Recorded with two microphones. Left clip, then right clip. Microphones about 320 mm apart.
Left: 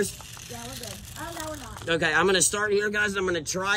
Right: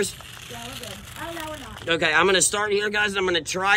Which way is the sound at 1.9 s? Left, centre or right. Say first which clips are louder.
Right 3 dB; centre.